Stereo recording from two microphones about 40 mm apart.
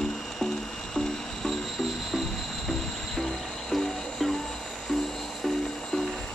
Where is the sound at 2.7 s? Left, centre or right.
Centre.